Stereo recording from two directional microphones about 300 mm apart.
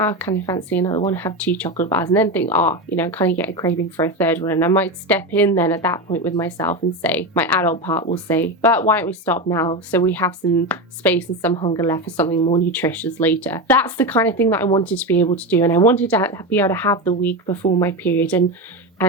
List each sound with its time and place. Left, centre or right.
0.0 s speech: centre
12.4 s speech: centre
12.7 s speech: centre
17.5 s speech: centre